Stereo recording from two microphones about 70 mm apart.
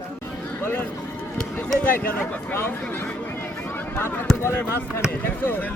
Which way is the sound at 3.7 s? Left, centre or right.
Left.